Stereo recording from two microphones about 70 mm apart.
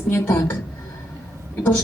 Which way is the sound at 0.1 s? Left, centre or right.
Left.